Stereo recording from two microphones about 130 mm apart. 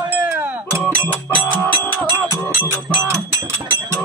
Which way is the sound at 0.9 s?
15° left (ahead or behind).